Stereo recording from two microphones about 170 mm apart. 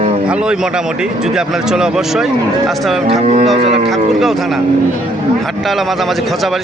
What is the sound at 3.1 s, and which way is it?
Speech, 40° right (ahead or behind).